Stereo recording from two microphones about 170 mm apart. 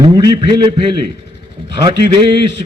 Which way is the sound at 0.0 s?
25° right (ahead or behind).